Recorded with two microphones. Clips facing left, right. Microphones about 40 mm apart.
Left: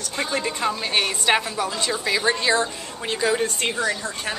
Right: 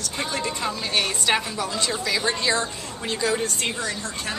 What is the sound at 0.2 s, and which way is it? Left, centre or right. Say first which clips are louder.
A woman's voice: left 3 dB; centre.